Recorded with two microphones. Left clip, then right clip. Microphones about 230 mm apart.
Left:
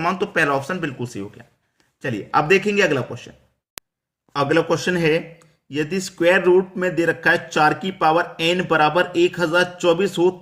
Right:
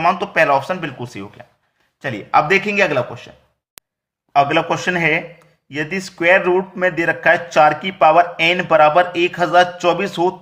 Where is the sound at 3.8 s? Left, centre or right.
Centre.